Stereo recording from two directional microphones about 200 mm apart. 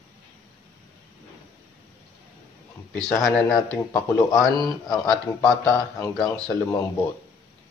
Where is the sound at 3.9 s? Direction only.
15° left (ahead or behind).